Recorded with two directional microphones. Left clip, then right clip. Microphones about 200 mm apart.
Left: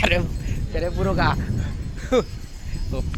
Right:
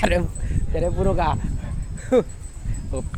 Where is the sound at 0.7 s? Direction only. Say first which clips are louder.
Right 2 dB; 25° right (ahead or behind).